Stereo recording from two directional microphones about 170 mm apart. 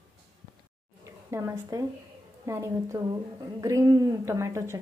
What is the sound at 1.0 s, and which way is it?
Speech, 15° right (ahead or behind).